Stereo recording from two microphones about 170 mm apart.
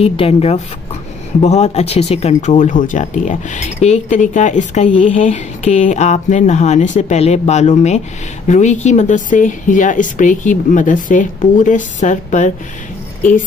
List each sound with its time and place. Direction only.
0.0 s speech: 35° left (ahead or behind)